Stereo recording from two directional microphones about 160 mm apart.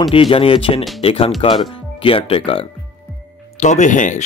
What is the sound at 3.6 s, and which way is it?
Speech, 50° left (ahead or behind).